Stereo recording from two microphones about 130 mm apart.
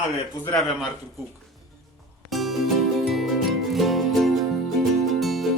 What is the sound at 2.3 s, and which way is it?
Music, centre (ahead or behind).